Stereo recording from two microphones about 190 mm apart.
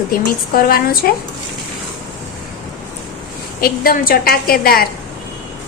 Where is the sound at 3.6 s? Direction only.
50° left (ahead or behind).